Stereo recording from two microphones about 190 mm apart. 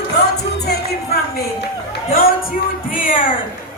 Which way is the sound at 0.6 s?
55° left (ahead or behind).